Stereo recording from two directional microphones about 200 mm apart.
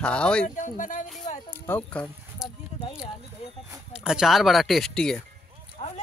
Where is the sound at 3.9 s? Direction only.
5° right (ahead or behind).